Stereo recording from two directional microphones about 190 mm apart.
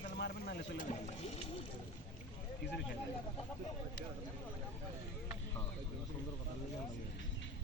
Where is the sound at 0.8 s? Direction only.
40° left (ahead or behind).